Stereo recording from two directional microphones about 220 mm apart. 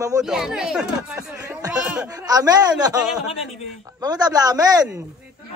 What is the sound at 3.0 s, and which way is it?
Speech, 5° right (ahead or behind).